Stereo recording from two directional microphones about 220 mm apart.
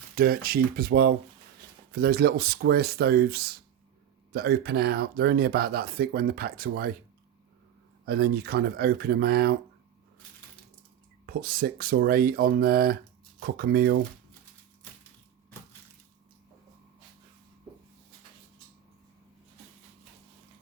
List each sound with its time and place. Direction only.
0.2 s speech: 40° right (ahead or behind)
8.0 s speech: 45° right (ahead or behind)
11.3 s speech: 45° right (ahead or behind)